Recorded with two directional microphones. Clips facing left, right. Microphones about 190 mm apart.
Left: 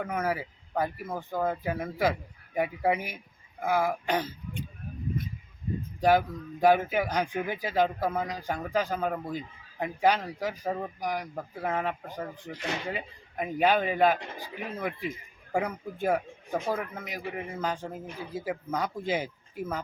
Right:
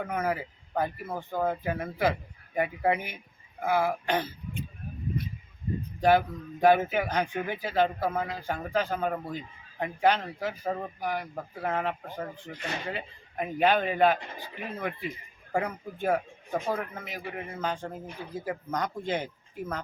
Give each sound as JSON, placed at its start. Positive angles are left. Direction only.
{"t": 0.0, "sound": "speech", "side_deg": 5}
{"t": 1.7, "sound": "speech", "side_deg": 10}
{"t": 6.0, "sound": "speech", "side_deg": 10}